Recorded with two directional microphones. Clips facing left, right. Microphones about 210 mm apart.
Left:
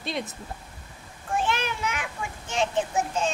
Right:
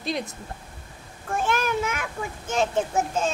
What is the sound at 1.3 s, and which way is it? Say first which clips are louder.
A child's voice: right 3 dB; 45° right (ahead or behind).